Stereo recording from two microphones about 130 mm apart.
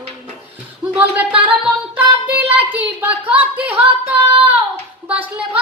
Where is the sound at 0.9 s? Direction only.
10° right (ahead or behind).